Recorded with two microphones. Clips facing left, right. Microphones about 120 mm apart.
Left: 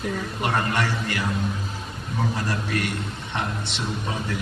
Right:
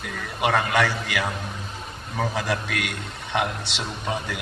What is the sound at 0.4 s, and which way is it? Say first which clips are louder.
Speech: right 4 dB; 80° right.